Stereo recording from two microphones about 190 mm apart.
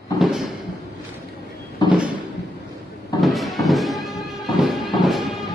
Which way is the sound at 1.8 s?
25° left (ahead or behind).